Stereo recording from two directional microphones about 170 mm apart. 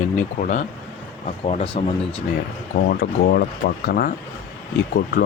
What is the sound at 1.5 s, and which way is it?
Speech, 35° left (ahead or behind).